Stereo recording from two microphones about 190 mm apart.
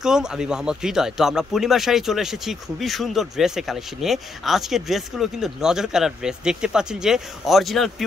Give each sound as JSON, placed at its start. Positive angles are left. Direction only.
{"t": 0.0, "sound": "speech", "side_deg": -5}